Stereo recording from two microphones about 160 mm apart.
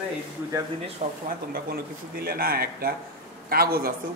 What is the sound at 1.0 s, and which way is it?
Speech, 45° right (ahead or behind).